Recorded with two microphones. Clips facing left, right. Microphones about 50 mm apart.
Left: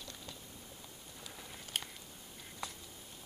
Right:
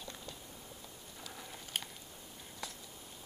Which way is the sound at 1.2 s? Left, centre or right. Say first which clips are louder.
Right 2 dB; centre.